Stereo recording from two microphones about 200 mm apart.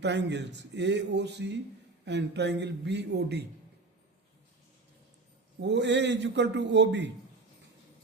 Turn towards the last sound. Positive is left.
turn(degrees=-60)  # may be behind; listen again after turning